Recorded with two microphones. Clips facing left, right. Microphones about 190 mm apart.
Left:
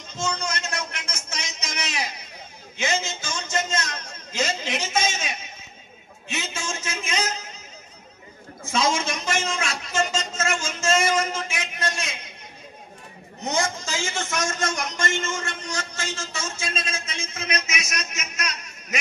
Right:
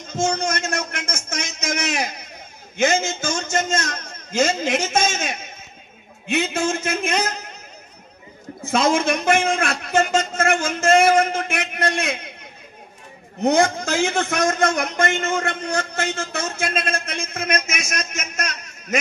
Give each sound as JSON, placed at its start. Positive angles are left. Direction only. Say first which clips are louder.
{"t": 0.1, "sound": "a man's voice", "louder": "right 7 dB", "side_deg": -50}
{"t": 8.6, "sound": "a man's voice", "louder": "right 6 dB", "side_deg": -60}
{"t": 13.4, "sound": "a man's voice", "louder": "right 9 dB", "side_deg": -60}